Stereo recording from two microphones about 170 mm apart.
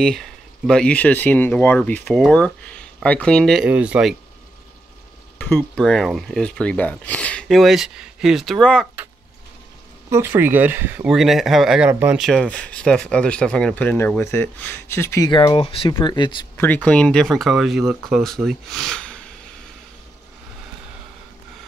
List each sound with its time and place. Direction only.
0.0 s speech: 5° left (ahead or behind)
5.4 s speech: 10° left (ahead or behind)
10.0 s speech: 15° right (ahead or behind)
12.2 s speech: 5° left (ahead or behind); by 16.3 s 30° left (ahead or behind)
16.5 s speech: 10° left (ahead or behind)